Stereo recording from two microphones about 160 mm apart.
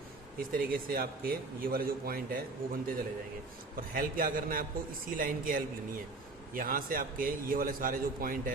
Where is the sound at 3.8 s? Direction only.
60° right (ahead or behind).